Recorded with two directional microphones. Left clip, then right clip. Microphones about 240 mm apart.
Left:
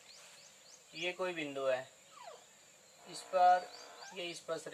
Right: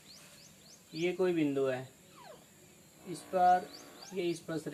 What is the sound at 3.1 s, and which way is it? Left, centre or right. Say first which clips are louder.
Speech: right 1 dB; centre.